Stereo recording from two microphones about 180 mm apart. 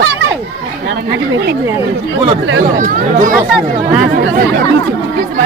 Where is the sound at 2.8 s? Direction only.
45° right (ahead or behind).